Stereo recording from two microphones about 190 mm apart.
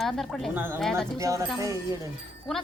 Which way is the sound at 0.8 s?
5° left (ahead or behind).